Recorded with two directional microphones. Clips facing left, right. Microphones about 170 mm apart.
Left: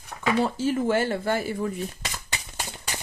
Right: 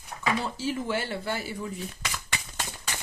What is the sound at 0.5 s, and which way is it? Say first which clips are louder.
Speech: left 6 dB; 50° left (ahead or behind).